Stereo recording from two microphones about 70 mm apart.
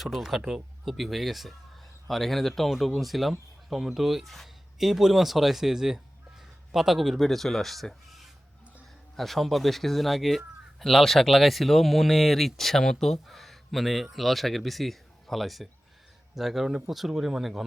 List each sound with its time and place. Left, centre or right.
0.0 s a man's voice: centre